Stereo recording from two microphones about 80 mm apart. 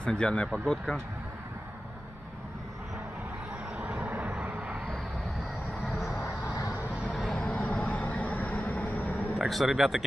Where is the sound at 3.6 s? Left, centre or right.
Centre.